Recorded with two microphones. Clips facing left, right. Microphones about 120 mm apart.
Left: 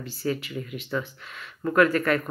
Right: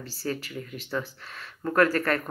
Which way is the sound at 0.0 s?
35° right (ahead or behind).